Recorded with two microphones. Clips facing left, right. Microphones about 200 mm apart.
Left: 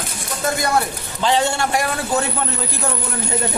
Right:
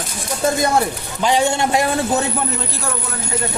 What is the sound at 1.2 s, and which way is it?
A man's voice, 15° right (ahead or behind).